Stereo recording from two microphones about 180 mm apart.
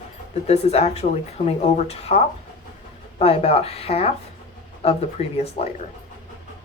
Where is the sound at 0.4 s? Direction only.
35° left (ahead or behind).